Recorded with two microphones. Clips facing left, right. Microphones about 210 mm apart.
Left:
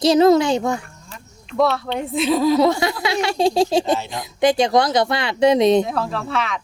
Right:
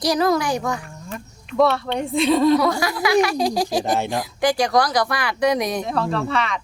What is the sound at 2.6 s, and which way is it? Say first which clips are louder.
Speech: left 3 dB; 25° left (ahead or behind).